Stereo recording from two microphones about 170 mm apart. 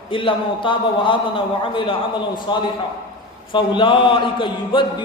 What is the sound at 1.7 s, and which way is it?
Speech, 30° left (ahead or behind).